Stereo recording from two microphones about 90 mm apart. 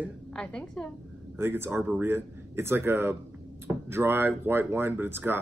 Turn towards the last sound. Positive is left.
turn(degrees=-25)  # may be behind; listen again after turning